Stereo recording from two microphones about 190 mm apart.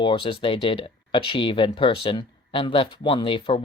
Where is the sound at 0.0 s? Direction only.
25° left (ahead or behind).